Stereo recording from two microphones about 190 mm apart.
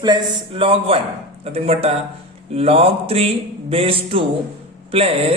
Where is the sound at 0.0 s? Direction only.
25° right (ahead or behind).